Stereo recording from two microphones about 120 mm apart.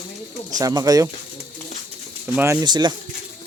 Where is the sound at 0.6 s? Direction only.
30° right (ahead or behind).